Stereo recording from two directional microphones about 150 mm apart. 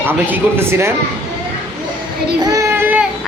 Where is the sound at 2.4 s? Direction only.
20° right (ahead or behind).